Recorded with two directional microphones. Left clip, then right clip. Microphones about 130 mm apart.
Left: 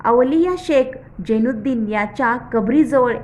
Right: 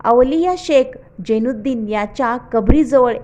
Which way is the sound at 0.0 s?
40° right (ahead or behind).